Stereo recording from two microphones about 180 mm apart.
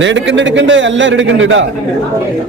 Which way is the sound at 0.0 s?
90° right.